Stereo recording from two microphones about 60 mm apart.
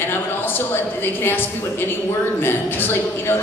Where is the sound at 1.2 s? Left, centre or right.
Left.